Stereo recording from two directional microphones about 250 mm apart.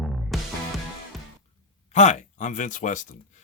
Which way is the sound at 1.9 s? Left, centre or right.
Left.